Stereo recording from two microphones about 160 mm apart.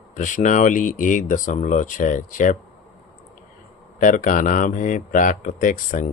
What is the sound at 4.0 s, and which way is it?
Speech, 55° left (ahead or behind).